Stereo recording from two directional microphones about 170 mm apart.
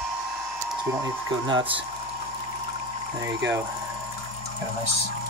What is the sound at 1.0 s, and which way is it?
Speech, 30° right (ahead or behind).